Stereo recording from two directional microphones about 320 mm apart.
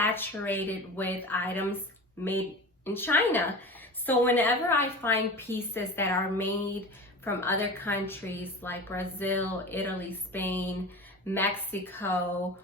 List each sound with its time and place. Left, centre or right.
0.0 s speech: centre
2.8 s a woman's voice: centre